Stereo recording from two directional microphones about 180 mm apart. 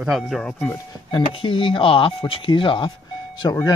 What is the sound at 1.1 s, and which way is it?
Speech, 30° left (ahead or behind).